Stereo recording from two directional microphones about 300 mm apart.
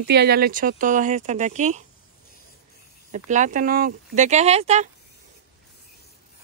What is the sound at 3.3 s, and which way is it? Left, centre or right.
Speech, right.